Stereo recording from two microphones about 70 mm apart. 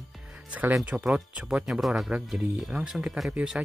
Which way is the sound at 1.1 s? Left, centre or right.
Centre.